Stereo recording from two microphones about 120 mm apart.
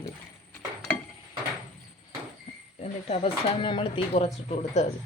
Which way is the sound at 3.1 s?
50° left (ahead or behind).